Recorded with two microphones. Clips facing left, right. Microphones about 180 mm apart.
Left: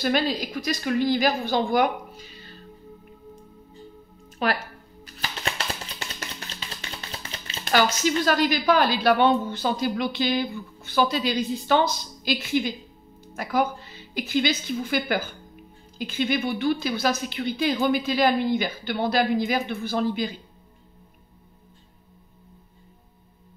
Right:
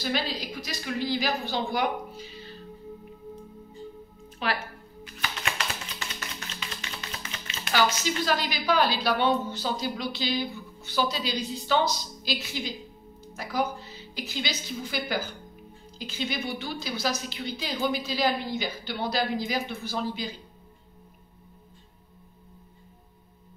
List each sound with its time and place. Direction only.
0.0 s a woman's voice: 50° left (ahead or behind)
4.4 s a woman's voice: 45° left (ahead or behind)
5.0 s music: 35° left (ahead or behind)
6.1 s a sound: 35° left (ahead or behind)
7.7 s a woman's voice: 50° left (ahead or behind)
13.2 s music: 55° left (ahead or behind)
14.1 s a woman's voice: 55° left (ahead or behind)